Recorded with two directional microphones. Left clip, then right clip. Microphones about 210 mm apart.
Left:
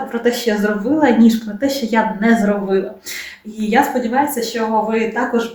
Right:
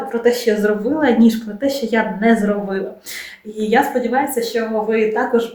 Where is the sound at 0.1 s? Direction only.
Centre (ahead or behind).